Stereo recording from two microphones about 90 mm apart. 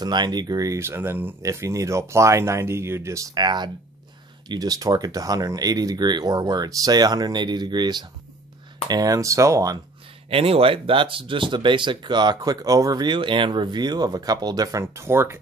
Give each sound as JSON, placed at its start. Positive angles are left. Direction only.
{"t": 0.0, "sound": "speech", "side_deg": -50}
{"t": 0.7, "sound": "speech", "side_deg": -25}
{"t": 1.4, "sound": "speech", "side_deg": -35}
{"t": 3.3, "sound": "speech", "side_deg": -55}
{"t": 10.3, "sound": "speech", "side_deg": -90}